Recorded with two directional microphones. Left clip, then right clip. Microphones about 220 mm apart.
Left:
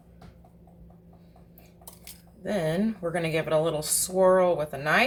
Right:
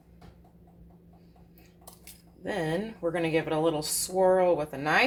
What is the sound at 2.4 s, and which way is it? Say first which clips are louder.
Speech: left 3 dB; 25° right (ahead or behind).